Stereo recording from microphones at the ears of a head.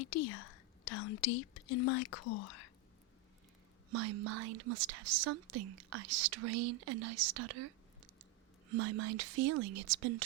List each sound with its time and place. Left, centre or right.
0.0 s speech: left
3.8 s speech: right